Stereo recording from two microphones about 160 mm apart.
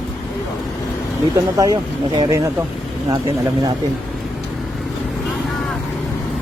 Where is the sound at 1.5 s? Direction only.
25° right (ahead or behind).